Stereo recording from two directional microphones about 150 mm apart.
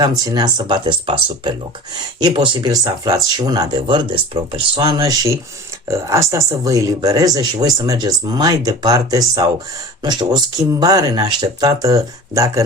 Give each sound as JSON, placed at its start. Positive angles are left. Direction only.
{"t": 0.3, "sound": "speech", "side_deg": -25}